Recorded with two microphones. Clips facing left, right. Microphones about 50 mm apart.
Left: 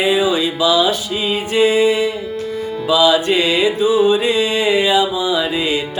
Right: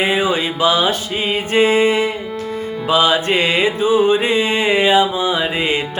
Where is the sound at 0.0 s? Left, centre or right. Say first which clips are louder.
Left 1 dB; right.